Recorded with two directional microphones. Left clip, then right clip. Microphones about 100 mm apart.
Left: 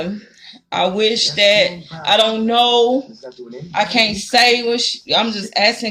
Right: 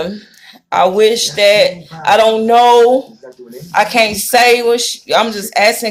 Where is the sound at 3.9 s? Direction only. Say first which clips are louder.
Right 1 dB; 15° left (ahead or behind).